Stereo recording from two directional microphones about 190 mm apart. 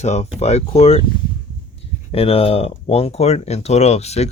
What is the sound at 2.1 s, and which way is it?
Speech, 30° left (ahead or behind).